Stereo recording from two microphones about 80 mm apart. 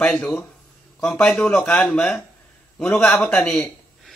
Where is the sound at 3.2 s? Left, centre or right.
Centre.